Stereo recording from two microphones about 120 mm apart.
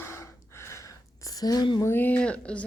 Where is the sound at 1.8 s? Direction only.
15° left (ahead or behind).